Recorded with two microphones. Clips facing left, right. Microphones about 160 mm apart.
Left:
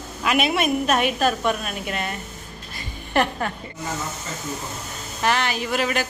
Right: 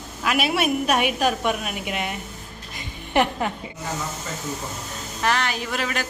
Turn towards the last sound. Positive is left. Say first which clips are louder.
# left 4 dB
turn(degrees=0)  # may be behind; listen again after turning